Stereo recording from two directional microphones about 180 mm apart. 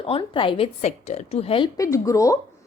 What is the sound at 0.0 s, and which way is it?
A woman's voice, 30° left (ahead or behind).